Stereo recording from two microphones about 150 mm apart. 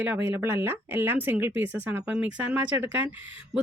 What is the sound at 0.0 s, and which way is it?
Speech, 10° right (ahead or behind).